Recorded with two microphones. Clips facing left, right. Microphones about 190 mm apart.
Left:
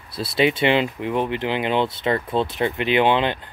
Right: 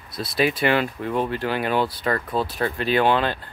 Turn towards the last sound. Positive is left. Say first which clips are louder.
# left 1 dB
turn(degrees=20)  # may be behind; listen again after turning